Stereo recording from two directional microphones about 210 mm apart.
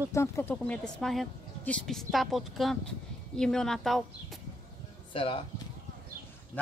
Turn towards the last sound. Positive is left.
turn(degrees=25)  # may be behind; listen again after turning